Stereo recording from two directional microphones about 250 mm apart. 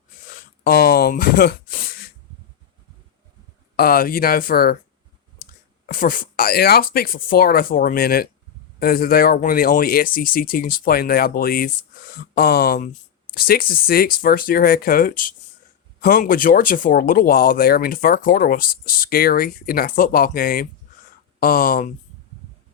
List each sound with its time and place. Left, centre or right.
0.6 s speech: left
3.8 s speech: left